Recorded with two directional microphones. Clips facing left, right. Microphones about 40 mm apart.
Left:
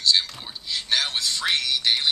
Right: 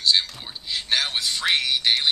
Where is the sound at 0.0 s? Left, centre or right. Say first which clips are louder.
Even; centre.